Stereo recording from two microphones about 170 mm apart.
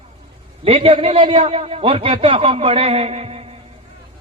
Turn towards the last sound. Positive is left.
turn(degrees=-35)  # may be behind; listen again after turning